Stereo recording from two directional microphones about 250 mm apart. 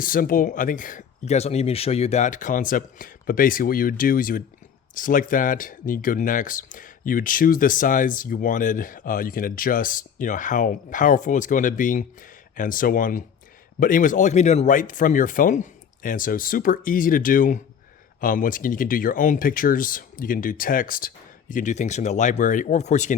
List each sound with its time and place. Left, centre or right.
0.0 s speech: left